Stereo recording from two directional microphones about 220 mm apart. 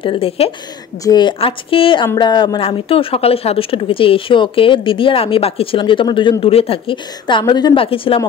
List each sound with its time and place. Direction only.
0.0 s speech: 25° left (ahead or behind)